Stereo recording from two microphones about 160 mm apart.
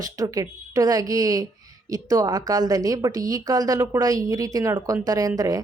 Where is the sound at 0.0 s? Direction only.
20° right (ahead or behind).